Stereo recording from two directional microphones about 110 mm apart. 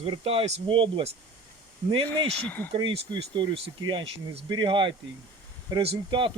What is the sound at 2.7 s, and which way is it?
Speech, 55° right (ahead or behind).